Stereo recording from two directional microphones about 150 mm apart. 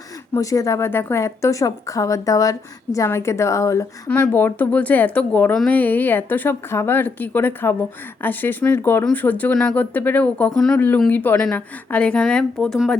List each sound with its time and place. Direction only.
0.3 s a woman's voice: 20° left (ahead or behind); by 13.0 s 5° left (ahead or behind)